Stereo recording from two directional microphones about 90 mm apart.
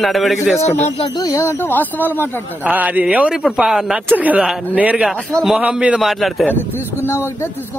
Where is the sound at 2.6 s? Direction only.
20° right (ahead or behind).